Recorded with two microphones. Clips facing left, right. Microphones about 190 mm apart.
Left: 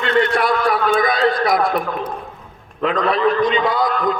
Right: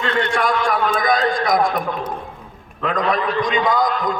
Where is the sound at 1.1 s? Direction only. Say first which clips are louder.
Left 1 dB; 45° right (ahead or behind).